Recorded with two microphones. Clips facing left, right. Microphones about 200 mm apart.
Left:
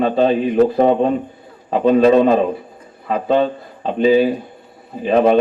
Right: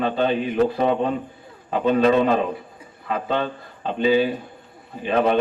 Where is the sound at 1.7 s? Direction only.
35° left (ahead or behind).